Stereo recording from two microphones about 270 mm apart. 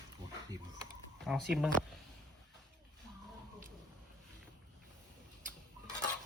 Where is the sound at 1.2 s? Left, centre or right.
Centre.